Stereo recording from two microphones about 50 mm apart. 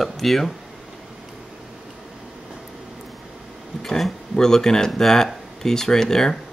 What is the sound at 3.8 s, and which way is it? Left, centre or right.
Speech, centre.